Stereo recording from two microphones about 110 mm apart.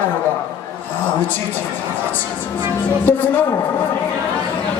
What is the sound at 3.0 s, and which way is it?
Speech, 15° left (ahead or behind).